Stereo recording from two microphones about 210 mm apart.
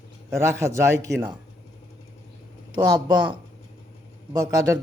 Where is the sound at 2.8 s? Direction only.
20° right (ahead or behind).